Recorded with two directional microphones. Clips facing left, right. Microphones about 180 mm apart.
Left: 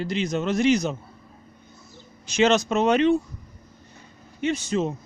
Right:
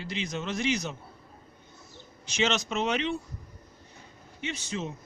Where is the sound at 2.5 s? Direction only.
45° left (ahead or behind).